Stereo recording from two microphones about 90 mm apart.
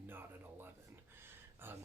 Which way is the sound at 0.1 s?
25° right (ahead or behind).